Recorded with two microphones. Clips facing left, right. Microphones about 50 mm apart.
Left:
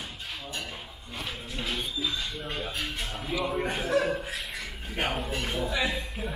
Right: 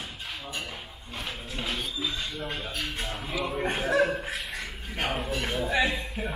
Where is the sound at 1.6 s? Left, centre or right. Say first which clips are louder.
Even; centre.